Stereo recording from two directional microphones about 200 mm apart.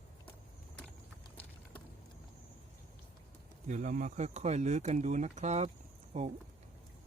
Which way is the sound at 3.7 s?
40° right (ahead or behind).